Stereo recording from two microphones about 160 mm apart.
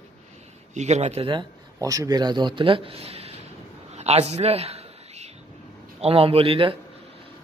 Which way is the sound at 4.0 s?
40° right (ahead or behind).